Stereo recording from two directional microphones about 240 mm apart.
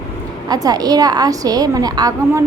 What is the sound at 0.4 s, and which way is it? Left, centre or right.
A woman's voice, centre.